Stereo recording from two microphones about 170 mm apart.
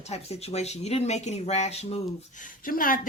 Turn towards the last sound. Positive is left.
turn(degrees=55)  # may be behind; listen again after turning